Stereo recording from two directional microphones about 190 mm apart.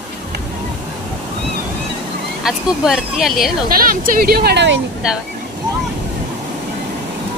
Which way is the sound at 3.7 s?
50° right (ahead or behind).